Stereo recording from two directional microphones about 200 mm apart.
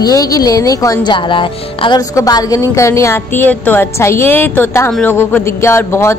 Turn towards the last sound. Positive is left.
turn(degrees=15)  # may be behind; listen again after turning